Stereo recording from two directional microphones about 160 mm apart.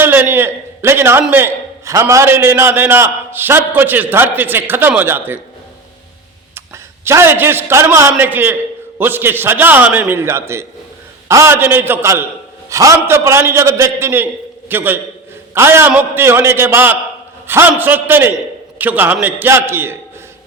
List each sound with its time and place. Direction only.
0.0 s a sound: 15° right (ahead or behind)
1.2 s a man's voice: 10° right (ahead or behind)
7.0 s a man's voice: 15° right (ahead or behind)